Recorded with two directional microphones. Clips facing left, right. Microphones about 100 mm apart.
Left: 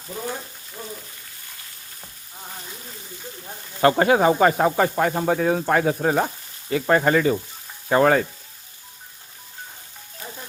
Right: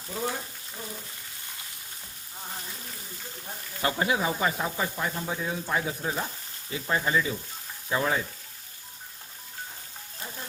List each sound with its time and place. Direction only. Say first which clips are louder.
3.8 s speech: left 10 dB; 60° left (ahead or behind)